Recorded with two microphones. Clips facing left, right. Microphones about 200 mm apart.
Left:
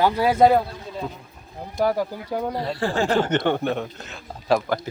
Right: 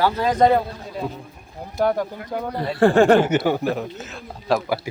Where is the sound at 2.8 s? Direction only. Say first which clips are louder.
Right 10 dB; 55° right (ahead or behind).